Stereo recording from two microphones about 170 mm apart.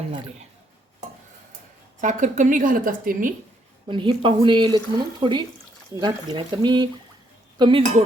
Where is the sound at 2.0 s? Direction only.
45° right (ahead or behind).